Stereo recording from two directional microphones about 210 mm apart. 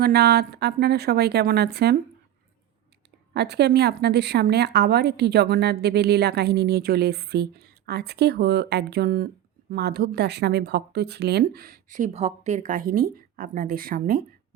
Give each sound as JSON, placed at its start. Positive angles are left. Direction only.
{"t": 0.0, "sound": "a woman's voice", "side_deg": -50}
{"t": 3.3, "sound": "a woman's voice", "side_deg": -50}